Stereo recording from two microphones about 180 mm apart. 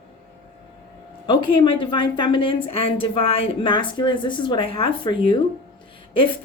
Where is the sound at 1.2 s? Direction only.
25° left (ahead or behind).